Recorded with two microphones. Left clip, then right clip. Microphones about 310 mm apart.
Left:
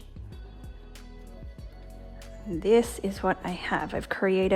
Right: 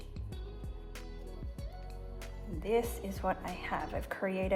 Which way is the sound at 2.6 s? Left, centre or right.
Left.